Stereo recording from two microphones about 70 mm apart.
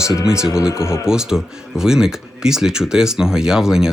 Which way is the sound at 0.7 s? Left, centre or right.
Left.